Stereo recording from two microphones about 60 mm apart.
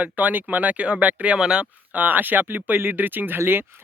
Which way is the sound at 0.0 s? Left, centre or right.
Right.